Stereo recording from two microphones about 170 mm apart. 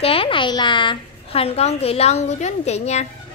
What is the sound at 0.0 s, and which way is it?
A woman's voice, 35° left (ahead or behind).